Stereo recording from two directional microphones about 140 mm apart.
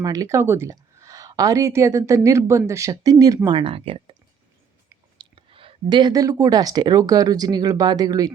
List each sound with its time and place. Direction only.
0.0 s speech: 25° right (ahead or behind); by 4.1 s 45° right (ahead or behind)
5.1 s speech: 35° right (ahead or behind)